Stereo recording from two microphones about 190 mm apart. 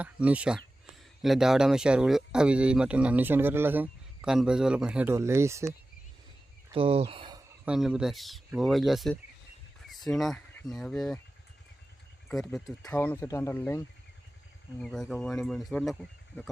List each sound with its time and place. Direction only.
0.0 s speech: 5° right (ahead or behind)
6.7 s speech: 30° right (ahead or behind)
7.6 s speech: 5° right (ahead or behind)
12.3 s speech: centre (ahead or behind)